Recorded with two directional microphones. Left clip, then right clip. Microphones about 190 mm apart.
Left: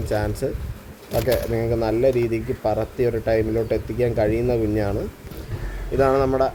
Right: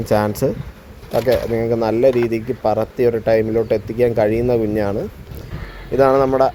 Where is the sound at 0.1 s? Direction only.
30° right (ahead or behind).